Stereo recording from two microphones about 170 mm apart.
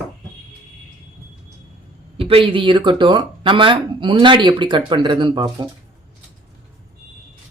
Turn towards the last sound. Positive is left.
turn(degrees=-25)  # may be behind; listen again after turning